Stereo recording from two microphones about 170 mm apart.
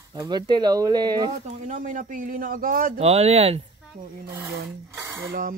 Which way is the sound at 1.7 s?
50° right (ahead or behind).